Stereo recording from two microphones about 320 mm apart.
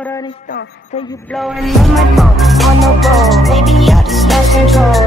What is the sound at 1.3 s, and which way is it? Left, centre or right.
Music, centre.